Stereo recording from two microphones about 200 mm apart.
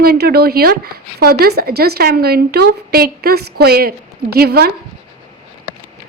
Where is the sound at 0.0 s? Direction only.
50° right (ahead or behind).